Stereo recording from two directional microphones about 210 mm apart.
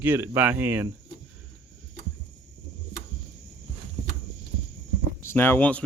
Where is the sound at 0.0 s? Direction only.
10° right (ahead or behind).